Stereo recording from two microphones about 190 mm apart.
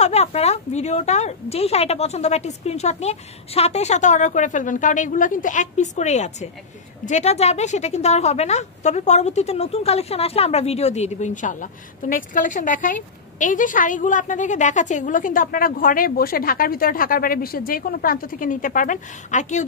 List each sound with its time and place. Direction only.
0.0 s a woman's voice: 35° left (ahead or behind)